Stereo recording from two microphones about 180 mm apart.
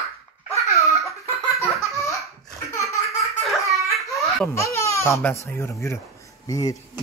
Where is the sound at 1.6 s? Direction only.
15° left (ahead or behind).